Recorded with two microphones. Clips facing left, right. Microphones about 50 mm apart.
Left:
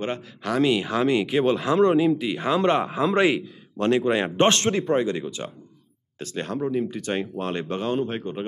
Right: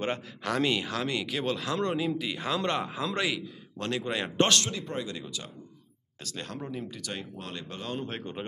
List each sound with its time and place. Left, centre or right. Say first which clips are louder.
0.0 s speech: left 3 dB; centre
0.8 s speech: left 9 dB; left
8.1 s speech: left 7 dB; centre